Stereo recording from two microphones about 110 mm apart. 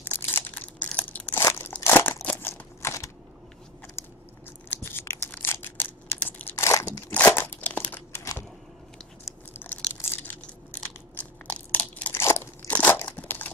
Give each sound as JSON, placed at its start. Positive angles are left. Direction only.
{"t": 0.0, "sound": "crushing", "side_deg": 20}
{"t": 0.8, "sound": "crunch", "side_deg": 15}
{"t": 4.6, "sound": "a sound", "side_deg": 20}
{"t": 7.1, "sound": "crumpling", "side_deg": 15}
{"t": 9.2, "sound": "chewing", "side_deg": 15}
{"t": 10.0, "sound": "crunch", "side_deg": 20}